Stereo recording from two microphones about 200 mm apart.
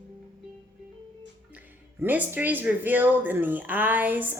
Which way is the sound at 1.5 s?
10° right (ahead or behind).